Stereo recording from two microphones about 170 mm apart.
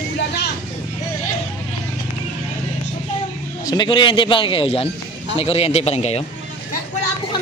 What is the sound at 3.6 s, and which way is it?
A man's voice, 25° left (ahead or behind).